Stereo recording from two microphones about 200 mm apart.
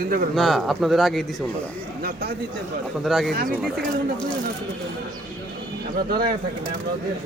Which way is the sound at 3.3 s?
50° right (ahead or behind).